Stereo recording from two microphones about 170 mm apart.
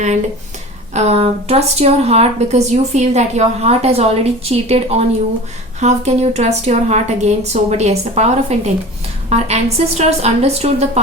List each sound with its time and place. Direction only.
0.9 s speech: 40° right (ahead or behind)